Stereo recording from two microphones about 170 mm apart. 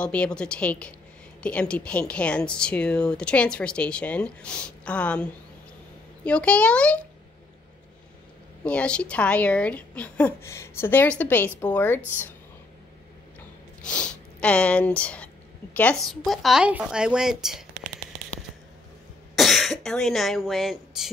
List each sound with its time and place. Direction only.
0.0 s speech: 5° left (ahead or behind)
8.6 s speech: 5° left (ahead or behind)
13.8 s speech: 5° left (ahead or behind)
19.3 s speech: centre (ahead or behind)